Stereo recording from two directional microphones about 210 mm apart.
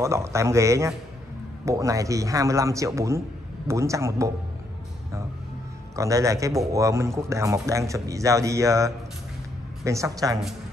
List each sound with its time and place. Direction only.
0.0 s a man's voice: 15° right (ahead or behind)
5.9 s a man's voice: 15° right (ahead or behind)